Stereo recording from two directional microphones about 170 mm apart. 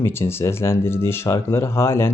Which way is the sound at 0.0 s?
15° left (ahead or behind).